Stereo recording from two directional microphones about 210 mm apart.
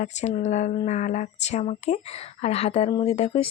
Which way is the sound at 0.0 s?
35° left (ahead or behind).